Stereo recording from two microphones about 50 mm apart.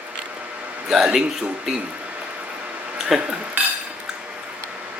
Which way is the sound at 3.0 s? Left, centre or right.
Centre.